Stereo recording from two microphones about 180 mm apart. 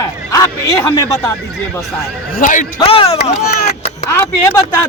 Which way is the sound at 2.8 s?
30° left (ahead or behind).